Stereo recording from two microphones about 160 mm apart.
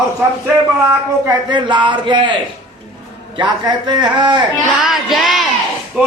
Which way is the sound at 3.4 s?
30° right (ahead or behind).